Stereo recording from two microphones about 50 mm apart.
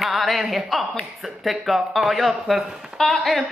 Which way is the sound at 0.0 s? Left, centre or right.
Centre.